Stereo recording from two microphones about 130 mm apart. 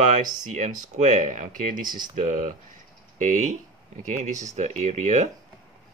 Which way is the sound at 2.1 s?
70° right (ahead or behind).